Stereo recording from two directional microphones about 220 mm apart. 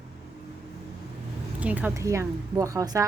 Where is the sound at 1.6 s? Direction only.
5° right (ahead or behind).